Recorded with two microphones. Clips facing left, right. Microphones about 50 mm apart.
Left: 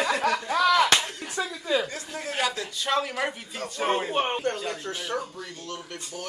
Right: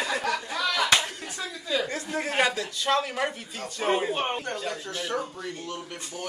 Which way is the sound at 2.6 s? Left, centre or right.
Centre.